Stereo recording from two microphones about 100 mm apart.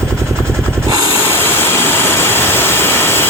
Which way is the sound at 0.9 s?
40° right (ahead or behind).